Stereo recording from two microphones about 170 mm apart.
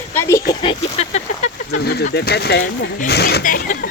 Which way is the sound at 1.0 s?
40° left (ahead or behind).